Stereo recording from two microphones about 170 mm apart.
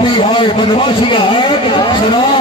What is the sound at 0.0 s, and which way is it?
A man's voice, 30° left (ahead or behind).